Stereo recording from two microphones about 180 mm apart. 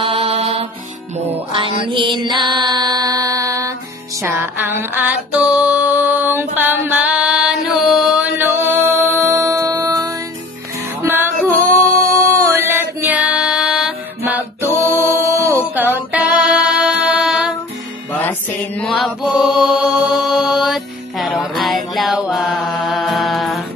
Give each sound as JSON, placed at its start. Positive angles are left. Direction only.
{"t": 0.0, "sound": "music", "side_deg": -30}
{"t": 4.2, "sound": "female singing", "side_deg": -15}
{"t": 11.0, "sound": "music", "side_deg": -15}
{"t": 12.4, "sound": "music", "side_deg": -15}
{"t": 14.6, "sound": "music", "side_deg": -15}
{"t": 18.8, "sound": "mantra", "side_deg": 0}